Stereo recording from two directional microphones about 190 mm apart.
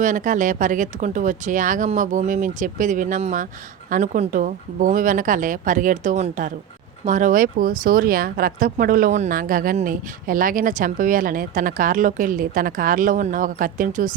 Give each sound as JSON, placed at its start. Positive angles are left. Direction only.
{"t": 0.0, "sound": "speech", "side_deg": -40}